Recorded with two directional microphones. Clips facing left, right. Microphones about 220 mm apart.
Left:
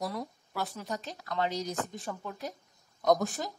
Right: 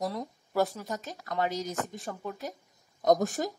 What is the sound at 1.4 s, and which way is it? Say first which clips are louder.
Speech: right 1 dB; 45° right (ahead or behind).